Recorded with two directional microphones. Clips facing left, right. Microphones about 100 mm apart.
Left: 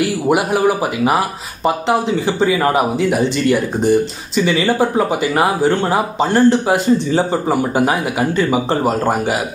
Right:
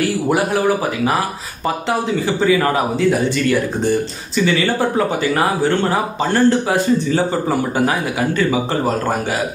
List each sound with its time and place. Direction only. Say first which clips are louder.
1.9 s speech: even; 20° left (ahead or behind)